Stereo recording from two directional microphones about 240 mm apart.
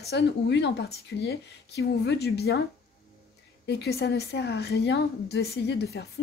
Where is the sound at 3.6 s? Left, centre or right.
Left.